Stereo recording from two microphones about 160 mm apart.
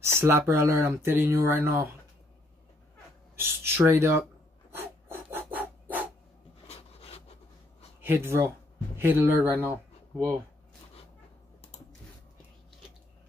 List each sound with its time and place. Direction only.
0.1 s speech: 15° right (ahead or behind)
3.3 s speech: 15° right (ahead or behind)
4.6 s filing: 15° right (ahead or behind)
6.7 s a sound: 40° left (ahead or behind)
8.0 s speech: 15° right (ahead or behind)